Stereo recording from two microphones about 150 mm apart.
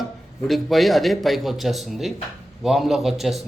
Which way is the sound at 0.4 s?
Centre (ahead or behind).